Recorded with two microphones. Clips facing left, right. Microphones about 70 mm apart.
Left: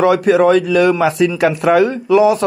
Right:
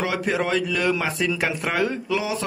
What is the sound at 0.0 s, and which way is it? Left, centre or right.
Speech, left.